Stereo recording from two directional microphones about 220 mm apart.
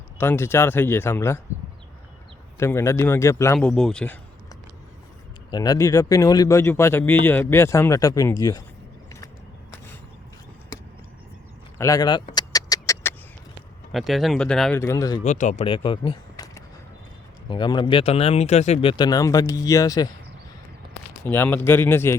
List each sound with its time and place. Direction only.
0.2 s speech: 10° left (ahead or behind)
2.6 s speech: 10° left (ahead or behind)
5.5 s speech: 15° left (ahead or behind)
11.8 s a sound: 15° left (ahead or behind)
13.9 s speech: centre (ahead or behind); by 15.2 s 15° left (ahead or behind)
15.2 s speech: 30° left (ahead or behind); by 20.1 s 15° left (ahead or behind)
21.2 s speech: 10° left (ahead or behind)